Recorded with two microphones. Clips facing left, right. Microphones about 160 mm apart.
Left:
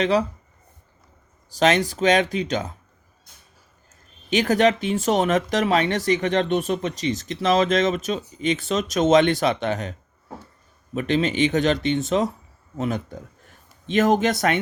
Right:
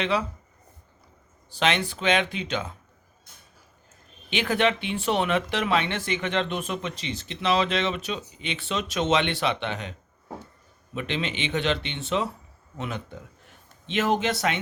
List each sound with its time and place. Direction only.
0.0 s speech: 40° left (ahead or behind)
1.5 s speech: 40° left (ahead or behind)
4.3 s speech: 40° left (ahead or behind)
10.9 s speech: 45° left (ahead or behind)